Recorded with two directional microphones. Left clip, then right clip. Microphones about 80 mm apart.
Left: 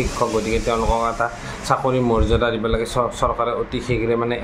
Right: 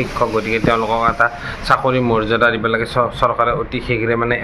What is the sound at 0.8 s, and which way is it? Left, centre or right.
A man's voice, centre.